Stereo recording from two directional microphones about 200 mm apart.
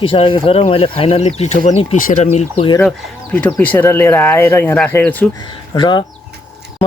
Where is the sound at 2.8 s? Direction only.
5° left (ahead or behind).